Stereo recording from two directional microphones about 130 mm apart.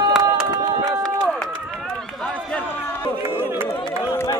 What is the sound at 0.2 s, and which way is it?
Run, 30° right (ahead or behind).